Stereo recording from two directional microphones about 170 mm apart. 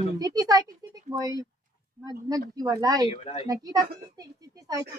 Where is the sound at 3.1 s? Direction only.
35° left (ahead or behind).